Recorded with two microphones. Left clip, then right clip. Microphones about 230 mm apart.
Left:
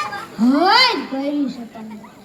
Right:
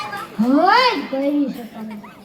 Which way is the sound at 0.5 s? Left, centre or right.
Left.